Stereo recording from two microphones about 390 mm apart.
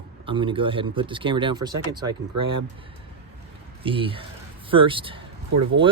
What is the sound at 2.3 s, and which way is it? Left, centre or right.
Speech, right.